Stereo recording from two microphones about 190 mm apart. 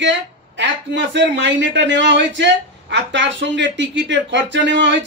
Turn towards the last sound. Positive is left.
turn(degrees=-70)  # may be behind; listen again after turning